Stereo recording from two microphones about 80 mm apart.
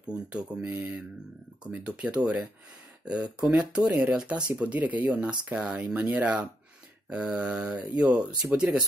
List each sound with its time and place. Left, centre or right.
0.0 s speech: centre